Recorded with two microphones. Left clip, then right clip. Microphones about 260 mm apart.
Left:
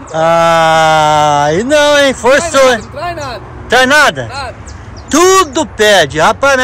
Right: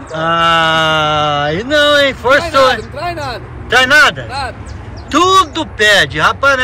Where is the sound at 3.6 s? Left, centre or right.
Left.